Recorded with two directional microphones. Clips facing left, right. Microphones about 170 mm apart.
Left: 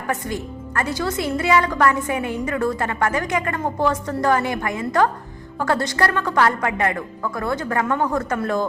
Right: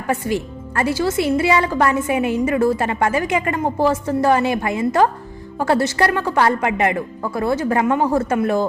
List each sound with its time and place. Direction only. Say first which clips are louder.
0.8 s a woman's voice: right 5 dB; 25° right (ahead or behind)